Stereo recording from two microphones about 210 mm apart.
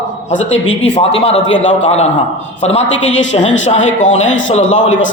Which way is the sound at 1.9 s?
30° left (ahead or behind).